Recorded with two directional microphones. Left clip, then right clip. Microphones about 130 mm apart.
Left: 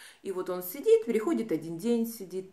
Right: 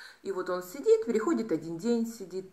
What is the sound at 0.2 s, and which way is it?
Speech, 20° left (ahead or behind).